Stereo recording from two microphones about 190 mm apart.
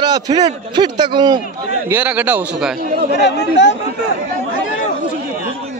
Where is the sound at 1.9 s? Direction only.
10° right (ahead or behind).